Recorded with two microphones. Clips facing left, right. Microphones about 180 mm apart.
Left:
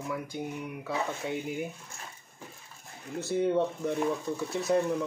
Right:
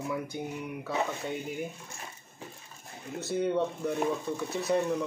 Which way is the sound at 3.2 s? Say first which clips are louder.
Left 2 dB; centre (ahead or behind).